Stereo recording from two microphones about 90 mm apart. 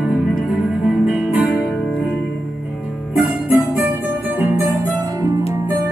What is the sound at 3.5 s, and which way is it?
Music, 15° right (ahead or behind).